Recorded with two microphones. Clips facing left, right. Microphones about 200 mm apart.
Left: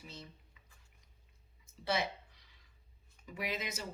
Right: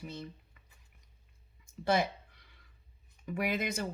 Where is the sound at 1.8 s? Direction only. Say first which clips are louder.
Right 6 dB; 50° right (ahead or behind).